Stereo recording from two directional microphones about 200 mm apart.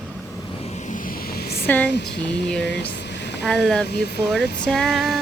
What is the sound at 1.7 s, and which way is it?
Speech, 10° left (ahead or behind).